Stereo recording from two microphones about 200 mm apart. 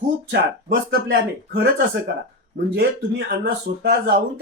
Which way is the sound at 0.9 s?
55° right (ahead or behind).